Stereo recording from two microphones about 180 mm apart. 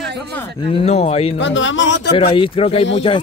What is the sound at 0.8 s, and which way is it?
Speech, 35° left (ahead or behind).